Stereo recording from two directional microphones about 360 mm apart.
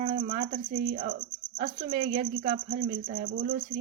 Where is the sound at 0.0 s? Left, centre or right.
Right.